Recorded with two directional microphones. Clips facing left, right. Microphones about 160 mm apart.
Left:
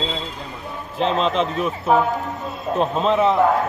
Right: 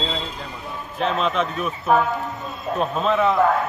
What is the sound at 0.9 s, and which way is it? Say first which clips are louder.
A man's voice: left 2 dB; 25° left (ahead or behind).